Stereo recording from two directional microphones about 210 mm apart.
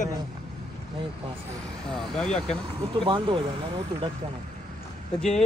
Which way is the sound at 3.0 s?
25° right (ahead or behind).